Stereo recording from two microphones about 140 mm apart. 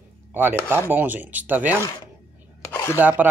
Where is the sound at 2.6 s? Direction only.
20° left (ahead or behind).